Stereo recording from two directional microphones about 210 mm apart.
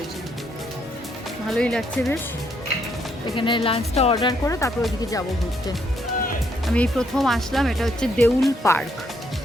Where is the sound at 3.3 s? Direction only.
25° left (ahead or behind).